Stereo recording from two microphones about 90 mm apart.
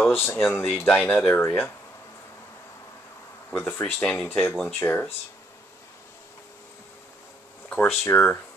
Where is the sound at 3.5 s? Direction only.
25° left (ahead or behind).